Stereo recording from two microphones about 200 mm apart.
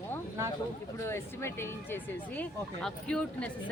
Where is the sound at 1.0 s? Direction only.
10° left (ahead or behind).